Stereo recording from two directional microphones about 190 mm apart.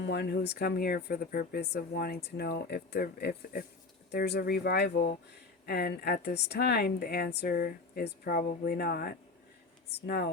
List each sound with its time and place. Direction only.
0.0 s speech: 65° left (ahead or behind)